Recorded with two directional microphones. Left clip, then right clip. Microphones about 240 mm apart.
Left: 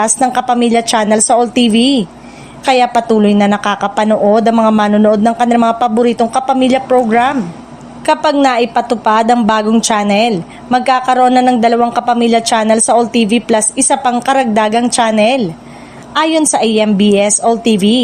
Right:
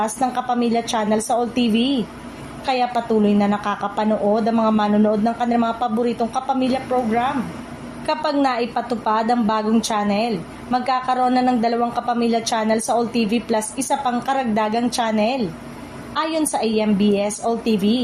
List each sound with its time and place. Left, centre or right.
0.0 s a woman's voice: left